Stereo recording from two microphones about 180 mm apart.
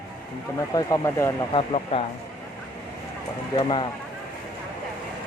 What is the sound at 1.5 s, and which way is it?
Speech, 30° left (ahead or behind).